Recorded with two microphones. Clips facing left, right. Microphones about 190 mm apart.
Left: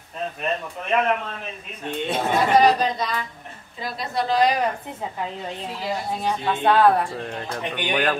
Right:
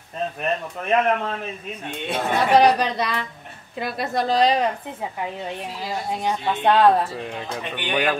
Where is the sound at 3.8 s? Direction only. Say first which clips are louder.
Right 2 dB; 55° right (ahead or behind).